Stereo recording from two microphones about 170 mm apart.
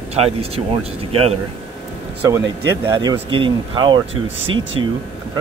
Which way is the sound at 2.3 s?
20° right (ahead or behind).